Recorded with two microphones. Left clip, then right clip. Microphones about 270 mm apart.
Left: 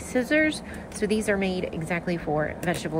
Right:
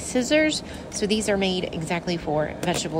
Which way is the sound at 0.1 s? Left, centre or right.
Centre.